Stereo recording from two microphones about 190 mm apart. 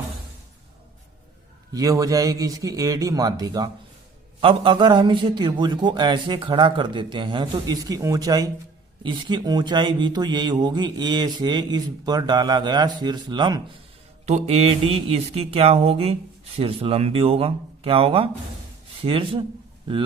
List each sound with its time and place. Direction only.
1.7 s a man's voice: 15° right (ahead or behind)
14.3 s a man's voice: 35° right (ahead or behind)